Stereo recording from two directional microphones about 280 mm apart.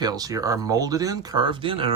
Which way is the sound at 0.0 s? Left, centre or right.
Centre.